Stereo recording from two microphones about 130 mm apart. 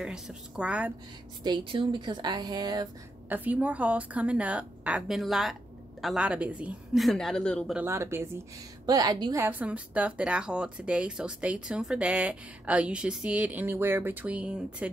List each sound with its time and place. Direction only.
0.0 s speech: 5° right (ahead or behind)
1.4 s speech: 35° right (ahead or behind)
3.3 s speech: 15° right (ahead or behind); by 7.7 s 5° left (ahead or behind)
7.7 s speech: 20° right (ahead or behind)
8.8 s speech: 30° right (ahead or behind)
9.4 s speech: 15° right (ahead or behind)